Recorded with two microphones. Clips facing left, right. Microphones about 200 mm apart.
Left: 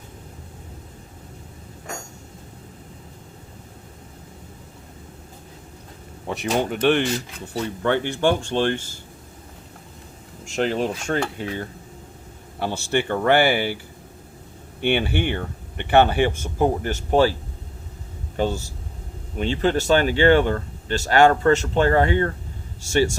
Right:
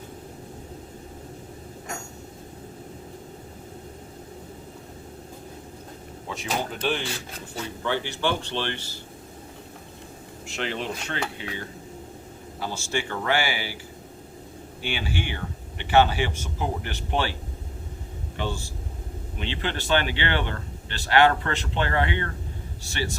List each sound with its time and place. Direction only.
6.2 s speech: 65° left (ahead or behind)
7.9 s speech: 55° left (ahead or behind)
10.4 s speech: 45° left (ahead or behind)
12.5 s speech: 60° left (ahead or behind)
14.8 s speech: 60° left (ahead or behind); by 17.3 s 40° left (ahead or behind)
18.3 s speech: 40° left (ahead or behind)